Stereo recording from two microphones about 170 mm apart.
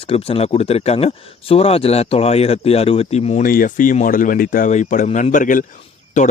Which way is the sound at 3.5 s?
55° left (ahead or behind).